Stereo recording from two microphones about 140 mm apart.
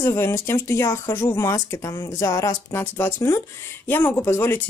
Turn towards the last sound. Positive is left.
turn(degrees=15)  # may be behind; listen again after turning